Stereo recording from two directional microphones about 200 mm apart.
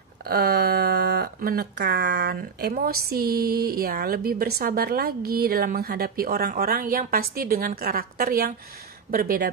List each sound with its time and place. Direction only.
0.2 s speech: 50° right (ahead or behind)